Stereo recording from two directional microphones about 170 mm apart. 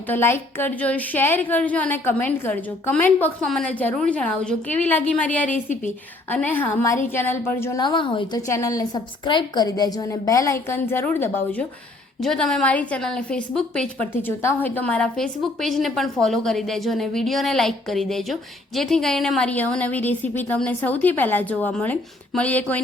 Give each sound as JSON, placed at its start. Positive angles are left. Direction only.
{"t": 0.1, "sound": "a woman's voice", "side_deg": 15}
{"t": 5.5, "sound": "a woman's voice", "side_deg": 50}
{"t": 6.3, "sound": "a woman's voice", "side_deg": 10}
{"t": 7.8, "sound": "a woman's voice", "side_deg": 25}
{"t": 8.4, "sound": "a woman's voice", "side_deg": 20}
{"t": 12.2, "sound": "a woman's voice", "side_deg": 0}